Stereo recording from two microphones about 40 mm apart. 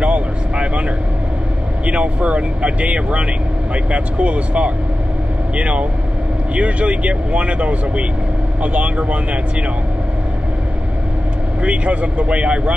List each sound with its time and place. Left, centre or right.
0.0 s vehicle: right
1.9 s speech: right
11.6 s speech: right